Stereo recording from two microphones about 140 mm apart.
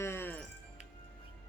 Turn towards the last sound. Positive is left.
turn(degrees=15)  # may be behind; listen again after turning